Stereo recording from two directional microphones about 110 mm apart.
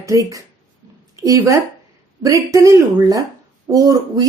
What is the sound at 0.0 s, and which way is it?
Speech, 30° right (ahead or behind).